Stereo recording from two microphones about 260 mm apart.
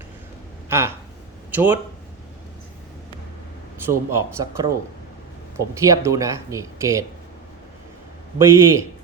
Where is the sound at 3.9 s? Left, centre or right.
Centre.